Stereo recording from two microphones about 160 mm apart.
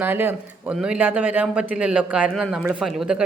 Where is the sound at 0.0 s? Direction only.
15° right (ahead or behind).